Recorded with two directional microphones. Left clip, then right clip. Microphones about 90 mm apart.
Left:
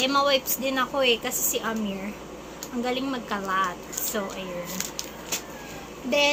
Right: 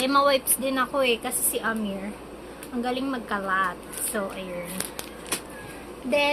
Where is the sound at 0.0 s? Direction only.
30° right (ahead or behind); by 1.7 s 10° right (ahead or behind).